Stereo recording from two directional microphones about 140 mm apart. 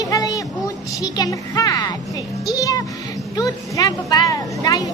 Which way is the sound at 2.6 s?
25° left (ahead or behind).